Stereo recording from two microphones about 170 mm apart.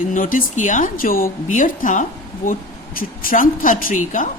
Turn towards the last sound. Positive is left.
turn(degrees=50)  # may be behind; listen again after turning